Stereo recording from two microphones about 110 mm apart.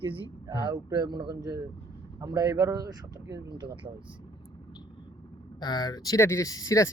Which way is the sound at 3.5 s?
45° right (ahead or behind).